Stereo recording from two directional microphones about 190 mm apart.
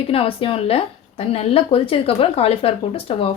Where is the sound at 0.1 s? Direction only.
30° left (ahead or behind).